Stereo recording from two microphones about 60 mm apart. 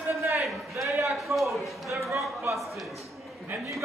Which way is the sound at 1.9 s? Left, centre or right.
Right.